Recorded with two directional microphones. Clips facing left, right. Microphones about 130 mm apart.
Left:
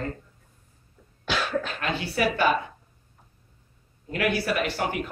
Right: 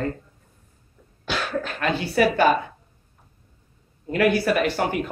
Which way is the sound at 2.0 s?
40° right (ahead or behind).